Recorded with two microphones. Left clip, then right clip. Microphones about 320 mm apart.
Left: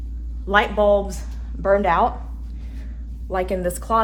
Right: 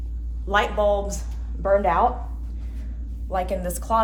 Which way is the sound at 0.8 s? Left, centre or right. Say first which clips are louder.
Left 4 dB; left.